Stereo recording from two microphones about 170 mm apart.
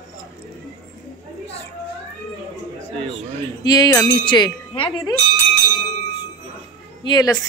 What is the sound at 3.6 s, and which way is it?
Speech, 25° left (ahead or behind).